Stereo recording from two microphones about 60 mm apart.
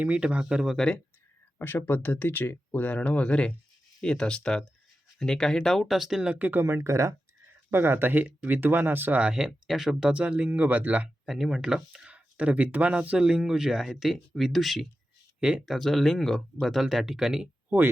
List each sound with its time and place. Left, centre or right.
0.0 s speech: right
1.5 s speech: left; by 6.3 s centre
6.3 s speech: right
7.7 s speech: right
9.2 s speech: centre
10.1 s speech: right
11.3 s speech: centre
12.0 s speech: right; by 14.8 s centre
15.4 s speech: centre
15.6 s speech: centre